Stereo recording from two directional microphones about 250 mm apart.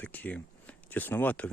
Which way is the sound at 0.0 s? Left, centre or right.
Centre.